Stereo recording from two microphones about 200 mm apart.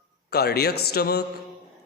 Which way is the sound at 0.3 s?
50° left (ahead or behind).